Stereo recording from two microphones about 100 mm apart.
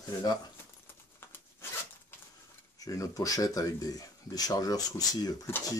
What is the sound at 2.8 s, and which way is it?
Speech, 35° left (ahead or behind).